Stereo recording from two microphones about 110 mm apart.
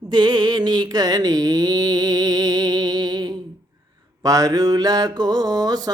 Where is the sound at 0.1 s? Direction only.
40° right (ahead or behind).